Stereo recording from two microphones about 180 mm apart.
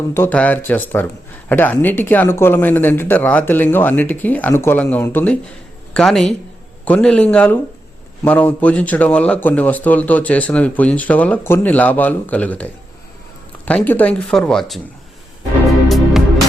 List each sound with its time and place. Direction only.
0.1 s a man's voice: 10° left (ahead or behind)
15.9 s music: centre (ahead or behind)